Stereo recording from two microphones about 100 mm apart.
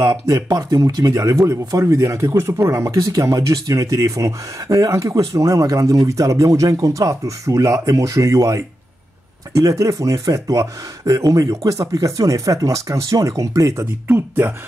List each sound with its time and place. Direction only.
0.0 s speech: 35° right (ahead or behind)